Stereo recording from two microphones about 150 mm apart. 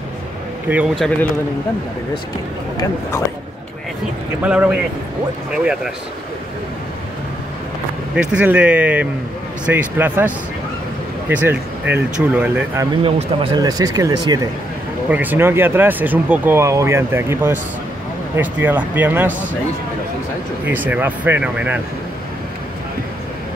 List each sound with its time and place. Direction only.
0.9 s a man's voice: 5° left (ahead or behind)
4.5 s speech: 10° right (ahead or behind)
8.2 s speech: 10° right (ahead or behind)
13.0 s a man's voice: 35° right (ahead or behind)
13.6 s speech: 25° right (ahead or behind)
15.0 s speech: 10° right (ahead or behind)
20.6 s speech: 10° right (ahead or behind)